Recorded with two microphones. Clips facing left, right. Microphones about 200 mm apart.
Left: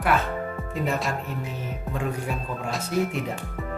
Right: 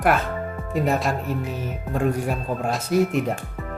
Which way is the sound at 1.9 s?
50° right (ahead or behind).